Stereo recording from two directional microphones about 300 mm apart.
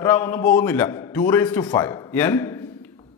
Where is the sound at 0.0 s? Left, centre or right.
Centre.